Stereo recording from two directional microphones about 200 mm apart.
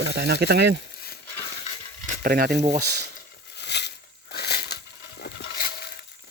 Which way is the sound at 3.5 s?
60° left (ahead or behind).